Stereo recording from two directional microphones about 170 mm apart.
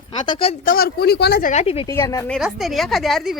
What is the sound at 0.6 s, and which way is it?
Speech, 55° left (ahead or behind).